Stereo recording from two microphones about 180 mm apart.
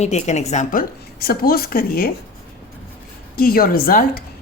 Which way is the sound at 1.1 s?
55° left (ahead or behind).